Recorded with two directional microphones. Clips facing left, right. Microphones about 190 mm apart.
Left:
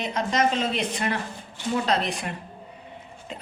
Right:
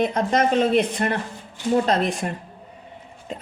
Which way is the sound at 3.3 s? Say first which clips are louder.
Right 5 dB; 45° right (ahead or behind).